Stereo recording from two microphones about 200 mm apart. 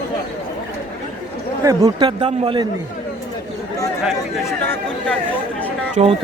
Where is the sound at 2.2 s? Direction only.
25° right (ahead or behind).